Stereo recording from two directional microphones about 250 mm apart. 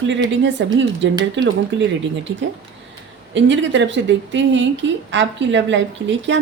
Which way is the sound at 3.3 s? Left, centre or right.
Right.